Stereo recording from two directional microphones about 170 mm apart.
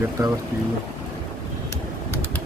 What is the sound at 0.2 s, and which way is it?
Speech, 20° right (ahead or behind).